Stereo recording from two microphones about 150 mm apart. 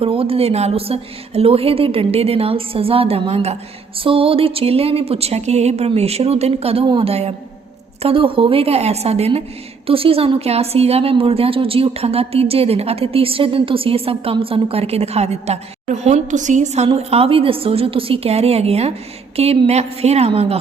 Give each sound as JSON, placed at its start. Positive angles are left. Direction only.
{"t": 0.0, "sound": "a woman's voice", "side_deg": -40}